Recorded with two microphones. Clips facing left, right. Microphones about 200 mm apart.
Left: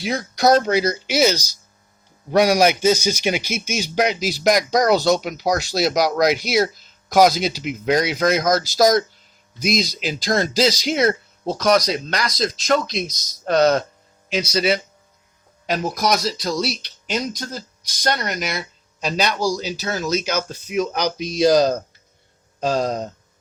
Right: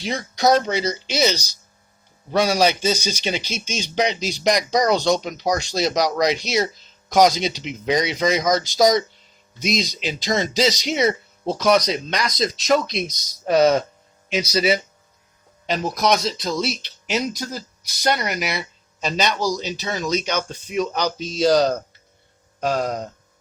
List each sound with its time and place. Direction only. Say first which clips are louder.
0.0 s speech: left 2 dB; 5° left (ahead or behind)
22.6 s speech: left 2 dB; 25° left (ahead or behind)